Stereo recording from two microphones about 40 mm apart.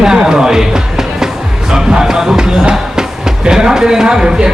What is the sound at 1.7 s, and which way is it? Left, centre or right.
Music, centre.